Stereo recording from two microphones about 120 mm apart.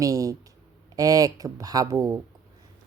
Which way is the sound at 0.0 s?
30° right (ahead or behind).